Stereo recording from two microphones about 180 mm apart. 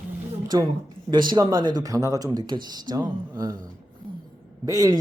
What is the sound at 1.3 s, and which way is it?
Speech, 25° right (ahead or behind).